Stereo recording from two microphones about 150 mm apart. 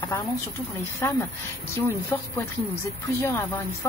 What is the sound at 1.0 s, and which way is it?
Speech, 15° left (ahead or behind).